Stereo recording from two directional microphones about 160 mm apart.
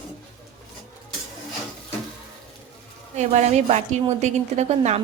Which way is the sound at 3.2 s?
45° right (ahead or behind).